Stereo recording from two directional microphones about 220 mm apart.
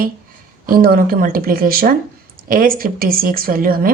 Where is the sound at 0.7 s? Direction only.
40° right (ahead or behind).